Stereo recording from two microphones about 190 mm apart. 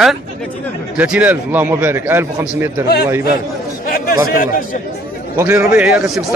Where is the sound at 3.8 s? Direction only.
50° left (ahead or behind).